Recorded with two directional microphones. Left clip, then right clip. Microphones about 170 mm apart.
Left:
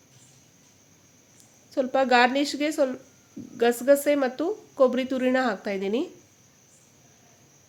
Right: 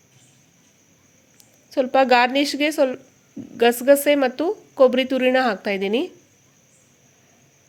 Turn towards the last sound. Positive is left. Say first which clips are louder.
# right 5 dB
turn(degrees=-20)  # may be behind; listen again after turning